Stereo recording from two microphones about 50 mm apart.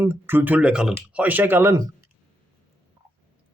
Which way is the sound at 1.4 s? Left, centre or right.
Right.